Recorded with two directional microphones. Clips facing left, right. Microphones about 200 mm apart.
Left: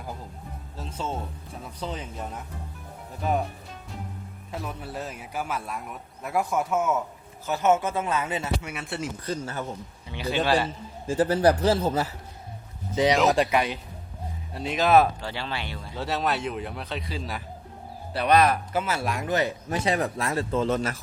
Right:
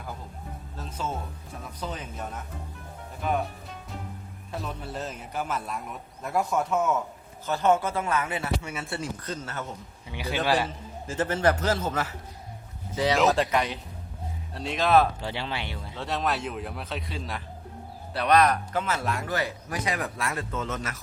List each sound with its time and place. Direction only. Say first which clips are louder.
0.8 s speech: left 1 dB; 30° left (ahead or behind)
4.6 s a man's voice: even; 5° left (ahead or behind)
7.5 s speech: left 1 dB; 20° left (ahead or behind)
8.8 s a man's voice: left 1 dB; centre (ahead or behind)
9.3 s speech: left 4 dB; 15° left (ahead or behind)
10.1 s a man's voice: left 1 dB; 15° right (ahead or behind)
11.0 s a man's voice: left 5 dB; 15° left (ahead or behind)
11.4 s a man's voice: left 2 dB; 35° left (ahead or behind)
12.9 s speech: left 2 dB; 20° left (ahead or behind)
15.2 s speech: even; 20° right (ahead or behind)
16.0 s a man's voice: left 2 dB; centre (ahead or behind); by 21.0 s 30° left (ahead or behind)